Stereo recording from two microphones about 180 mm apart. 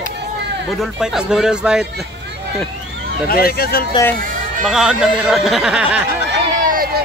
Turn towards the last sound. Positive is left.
turn(degrees=-55)  # may be behind; listen again after turning